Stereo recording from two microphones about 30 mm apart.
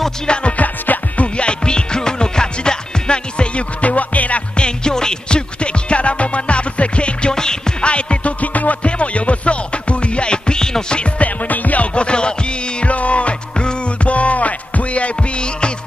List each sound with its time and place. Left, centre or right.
0.3 s music: left
0.6 s music: left
1.2 s music: left
3.8 s music: left
4.6 s music: left
5.6 s music: left
7.3 s music: left
7.8 s music: left
8.8 s music: left
11.1 s music: left
11.8 s music: left
12.8 s music: left